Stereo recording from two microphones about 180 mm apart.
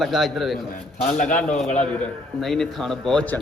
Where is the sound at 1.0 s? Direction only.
45° left (ahead or behind).